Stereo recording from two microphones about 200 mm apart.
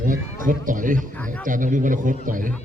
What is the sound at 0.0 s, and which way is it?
A man's voice, 40° right (ahead or behind).